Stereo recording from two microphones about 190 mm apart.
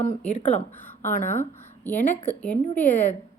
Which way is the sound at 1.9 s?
10° left (ahead or behind).